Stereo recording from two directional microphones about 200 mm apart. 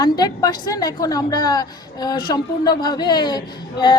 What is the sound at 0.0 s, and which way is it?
A woman's voice, 20° left (ahead or behind).